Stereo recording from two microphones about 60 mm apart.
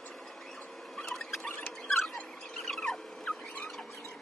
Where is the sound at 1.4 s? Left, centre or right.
Centre.